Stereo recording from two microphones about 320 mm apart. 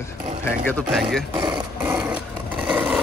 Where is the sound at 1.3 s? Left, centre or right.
Centre.